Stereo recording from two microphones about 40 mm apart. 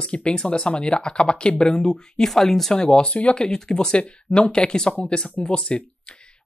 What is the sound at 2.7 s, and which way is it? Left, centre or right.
Speech, centre.